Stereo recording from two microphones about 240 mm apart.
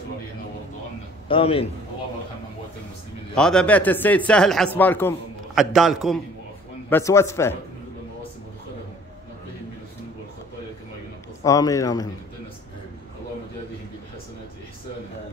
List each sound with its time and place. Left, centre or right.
1.3 s a man's voice: left
3.3 s speech: centre
6.9 s a man's voice: centre
11.4 s a man's voice: centre